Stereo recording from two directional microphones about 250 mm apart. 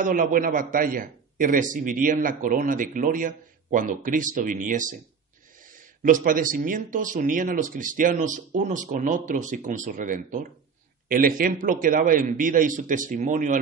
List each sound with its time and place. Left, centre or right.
0.0 s a man's voice: right
6.0 s a man's voice: right